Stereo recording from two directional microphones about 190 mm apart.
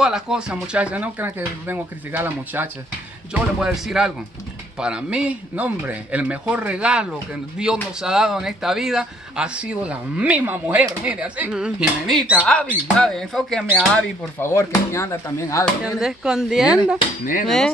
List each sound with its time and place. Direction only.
0.0 s speech: centre (ahead or behind)
13.9 s speech: 15° left (ahead or behind)
15.8 s speech: 5° right (ahead or behind)